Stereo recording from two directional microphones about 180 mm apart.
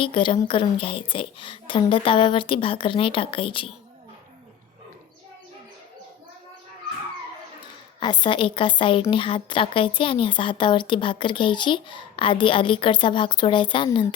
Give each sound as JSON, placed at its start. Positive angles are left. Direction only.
{"t": 0.0, "sound": "a woman's voice", "side_deg": 30}
{"t": 7.9, "sound": "a woman's voice", "side_deg": 25}